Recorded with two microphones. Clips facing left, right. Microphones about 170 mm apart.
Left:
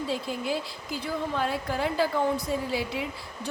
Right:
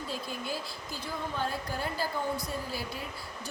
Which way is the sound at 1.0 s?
85° left.